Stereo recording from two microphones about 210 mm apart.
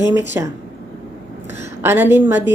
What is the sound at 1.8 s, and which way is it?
Speech, 10° right (ahead or behind).